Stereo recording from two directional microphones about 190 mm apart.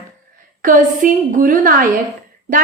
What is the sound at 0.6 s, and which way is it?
A woman's voice, 45° right (ahead or behind).